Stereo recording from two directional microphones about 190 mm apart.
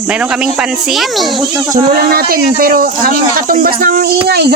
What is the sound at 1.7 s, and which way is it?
Speech, 55° right (ahead or behind).